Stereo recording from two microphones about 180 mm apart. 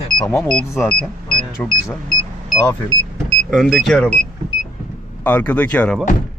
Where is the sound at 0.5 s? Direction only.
Centre (ahead or behind).